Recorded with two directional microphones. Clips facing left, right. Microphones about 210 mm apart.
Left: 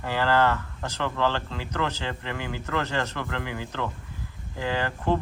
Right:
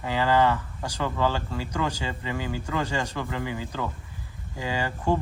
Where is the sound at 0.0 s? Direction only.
10° right (ahead or behind).